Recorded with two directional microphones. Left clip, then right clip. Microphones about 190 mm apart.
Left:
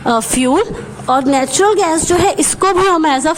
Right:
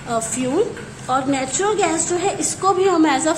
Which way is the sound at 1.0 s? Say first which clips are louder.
Left 7 dB; 65° left (ahead or behind).